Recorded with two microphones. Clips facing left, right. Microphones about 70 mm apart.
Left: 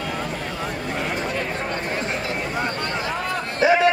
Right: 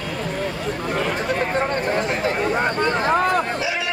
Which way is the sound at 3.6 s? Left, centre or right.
Left.